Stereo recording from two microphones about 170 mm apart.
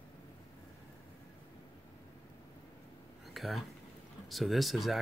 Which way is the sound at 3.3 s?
Centre (ahead or behind).